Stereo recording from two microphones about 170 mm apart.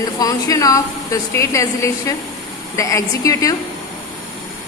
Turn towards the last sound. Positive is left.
turn(degrees=20)  # may be behind; listen again after turning